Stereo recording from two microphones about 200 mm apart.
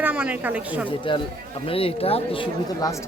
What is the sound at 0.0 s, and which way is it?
Speech, 5° right (ahead or behind).